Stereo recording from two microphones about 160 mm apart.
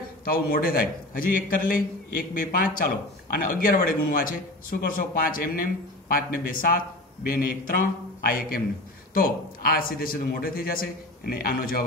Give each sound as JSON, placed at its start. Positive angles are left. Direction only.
{"t": 0.2, "sound": "a man's voice", "side_deg": 65}